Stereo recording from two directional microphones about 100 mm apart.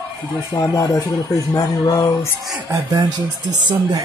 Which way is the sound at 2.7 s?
25° right (ahead or behind).